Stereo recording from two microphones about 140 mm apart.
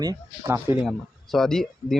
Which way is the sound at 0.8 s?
Centre (ahead or behind).